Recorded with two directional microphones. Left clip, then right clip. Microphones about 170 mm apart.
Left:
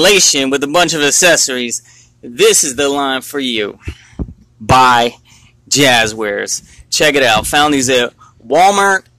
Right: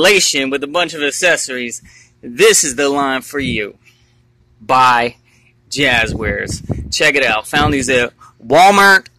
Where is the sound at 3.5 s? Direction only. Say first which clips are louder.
Left 3 dB; 15° left (ahead or behind).